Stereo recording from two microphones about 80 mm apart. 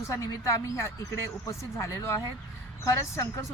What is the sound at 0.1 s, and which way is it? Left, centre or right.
A woman's voice, left.